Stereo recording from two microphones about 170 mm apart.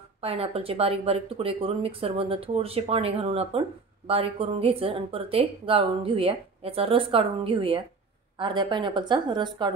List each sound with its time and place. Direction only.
0.2 s a woman's voice: 35° right (ahead or behind)